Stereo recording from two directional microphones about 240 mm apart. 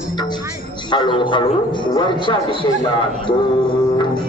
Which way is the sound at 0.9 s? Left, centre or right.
Centre.